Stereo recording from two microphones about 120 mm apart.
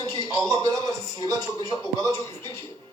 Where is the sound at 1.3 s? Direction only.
35° left (ahead or behind).